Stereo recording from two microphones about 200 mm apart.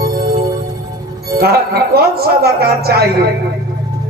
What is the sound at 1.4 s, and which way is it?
Speech, 50° right (ahead or behind).